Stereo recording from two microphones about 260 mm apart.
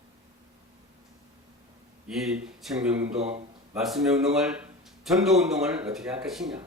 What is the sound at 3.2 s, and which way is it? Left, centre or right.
Speech, right.